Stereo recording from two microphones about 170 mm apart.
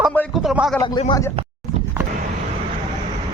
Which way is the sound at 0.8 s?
30° left (ahead or behind).